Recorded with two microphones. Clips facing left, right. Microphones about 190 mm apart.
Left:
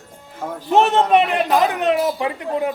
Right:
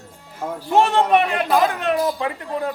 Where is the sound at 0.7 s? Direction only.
20° left (ahead or behind).